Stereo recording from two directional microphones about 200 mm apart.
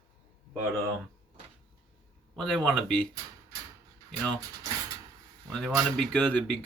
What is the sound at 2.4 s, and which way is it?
Speech, centre (ahead or behind).